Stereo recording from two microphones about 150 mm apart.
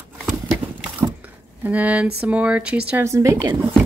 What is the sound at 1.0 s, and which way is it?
Squish, 10° right (ahead or behind).